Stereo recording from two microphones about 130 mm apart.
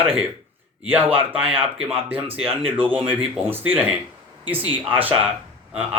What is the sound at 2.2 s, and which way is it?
Speech, 45° right (ahead or behind).